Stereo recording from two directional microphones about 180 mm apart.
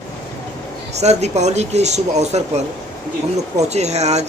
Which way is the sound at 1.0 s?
40° right (ahead or behind).